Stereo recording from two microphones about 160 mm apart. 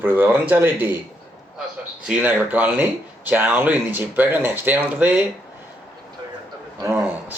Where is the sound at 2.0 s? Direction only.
10° right (ahead or behind).